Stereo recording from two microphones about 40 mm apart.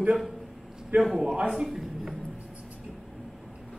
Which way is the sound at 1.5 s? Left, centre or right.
Centre.